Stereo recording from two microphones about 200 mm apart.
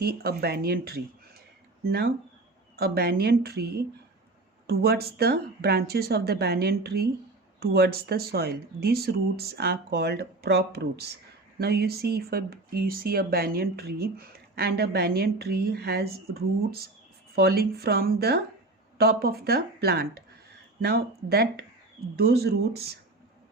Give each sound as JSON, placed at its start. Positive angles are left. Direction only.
{"t": 0.0, "sound": "speech", "side_deg": -50}
{"t": 2.7, "sound": "speech", "side_deg": -55}